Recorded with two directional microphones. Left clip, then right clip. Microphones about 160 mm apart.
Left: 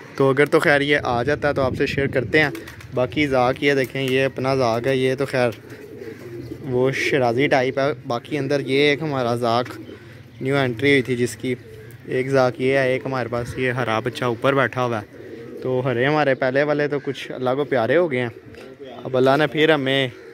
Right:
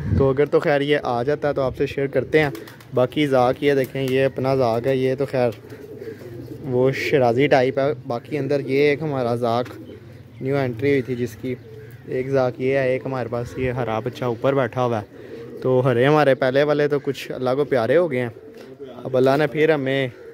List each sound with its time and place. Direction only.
0.2 s speech: centre (ahead or behind)
2.9 s speech: 25° right (ahead or behind); by 5.6 s 10° right (ahead or behind)
6.7 s speech: 25° right (ahead or behind)
8.1 s speech: 5° right (ahead or behind)
14.8 s speech: 20° right (ahead or behind)
15.6 s speech: 40° right (ahead or behind); by 20.1 s 5° right (ahead or behind)